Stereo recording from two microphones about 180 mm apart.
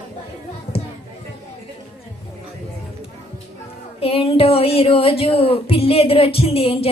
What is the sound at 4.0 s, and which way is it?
Speech, 30° left (ahead or behind).